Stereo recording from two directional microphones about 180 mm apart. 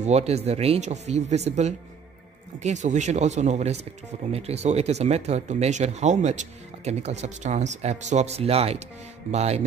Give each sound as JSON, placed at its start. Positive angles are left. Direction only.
{"t": 0.0, "sound": "speech", "side_deg": -35}